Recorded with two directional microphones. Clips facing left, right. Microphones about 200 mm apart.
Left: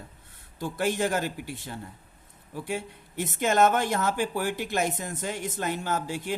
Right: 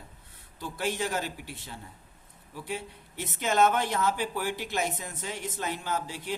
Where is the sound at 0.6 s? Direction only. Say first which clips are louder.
Left 5 dB; 50° left (ahead or behind).